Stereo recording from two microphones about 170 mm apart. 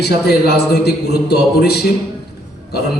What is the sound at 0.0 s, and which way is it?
A man's voice, 70° left (ahead or behind).